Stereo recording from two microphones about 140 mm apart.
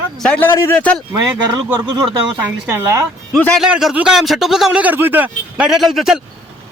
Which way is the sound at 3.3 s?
5° left (ahead or behind).